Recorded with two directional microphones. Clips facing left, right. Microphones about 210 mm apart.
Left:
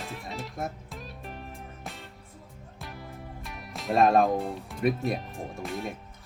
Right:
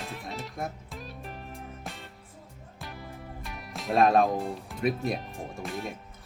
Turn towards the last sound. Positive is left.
turn(degrees=0)  # may be behind; listen again after turning